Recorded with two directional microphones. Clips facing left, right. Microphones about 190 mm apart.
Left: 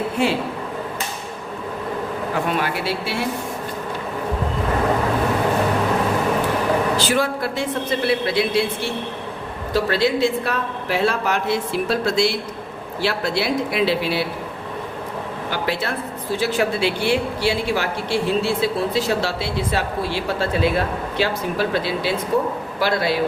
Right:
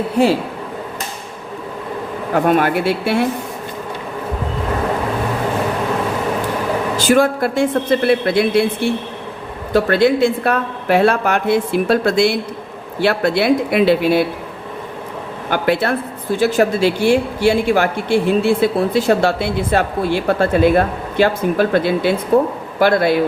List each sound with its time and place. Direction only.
0.2 s a man's voice: 40° right (ahead or behind)
2.3 s speech: 50° right (ahead or behind)
6.9 s a woman's voice: 50° right (ahead or behind)
15.4 s a woman's voice: 55° right (ahead or behind)
16.4 s a woman's voice: 45° right (ahead or behind)